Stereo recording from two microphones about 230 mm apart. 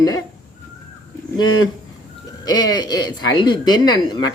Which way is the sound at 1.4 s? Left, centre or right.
Centre.